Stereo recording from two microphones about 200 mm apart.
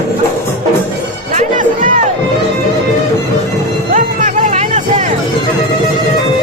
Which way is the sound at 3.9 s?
40° right (ahead or behind).